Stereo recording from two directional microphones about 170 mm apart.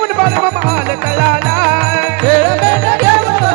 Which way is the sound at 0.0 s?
10° right (ahead or behind).